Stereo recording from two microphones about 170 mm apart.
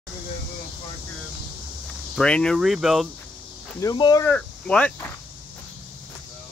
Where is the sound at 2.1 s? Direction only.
5° left (ahead or behind).